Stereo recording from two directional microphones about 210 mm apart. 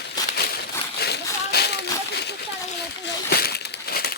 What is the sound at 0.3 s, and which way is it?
Crumpling, 50° left (ahead or behind).